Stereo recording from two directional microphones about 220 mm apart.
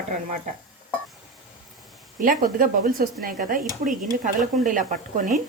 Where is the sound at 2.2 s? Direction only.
40° right (ahead or behind).